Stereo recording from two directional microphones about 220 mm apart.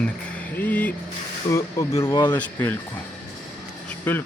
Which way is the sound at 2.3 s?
10° left (ahead or behind).